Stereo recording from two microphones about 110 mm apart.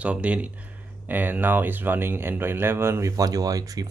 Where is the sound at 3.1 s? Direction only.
35° right (ahead or behind).